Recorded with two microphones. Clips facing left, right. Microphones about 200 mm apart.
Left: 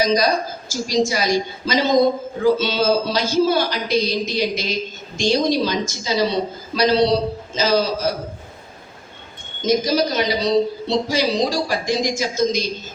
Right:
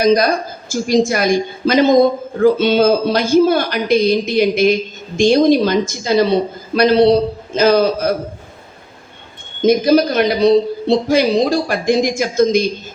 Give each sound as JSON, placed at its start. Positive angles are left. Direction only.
{"t": 0.0, "sound": "a woman's voice", "side_deg": -55}
{"t": 9.6, "sound": "a woman's voice", "side_deg": -55}